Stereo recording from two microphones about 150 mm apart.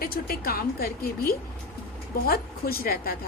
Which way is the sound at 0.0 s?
80° left.